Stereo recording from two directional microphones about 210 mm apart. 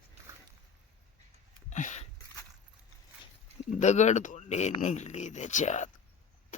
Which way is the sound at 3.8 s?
35° left (ahead or behind).